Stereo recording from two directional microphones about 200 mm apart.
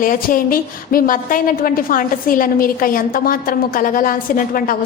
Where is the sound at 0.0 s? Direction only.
45° left (ahead or behind).